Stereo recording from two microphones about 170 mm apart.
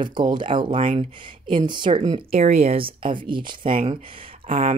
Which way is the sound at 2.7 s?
30° right (ahead or behind).